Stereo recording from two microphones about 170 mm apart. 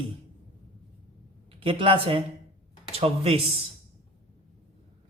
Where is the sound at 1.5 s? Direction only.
30° right (ahead or behind).